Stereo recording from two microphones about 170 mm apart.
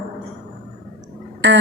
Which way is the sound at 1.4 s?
90° right.